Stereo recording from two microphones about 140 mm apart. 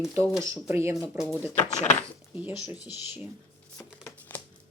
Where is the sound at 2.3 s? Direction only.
15° right (ahead or behind).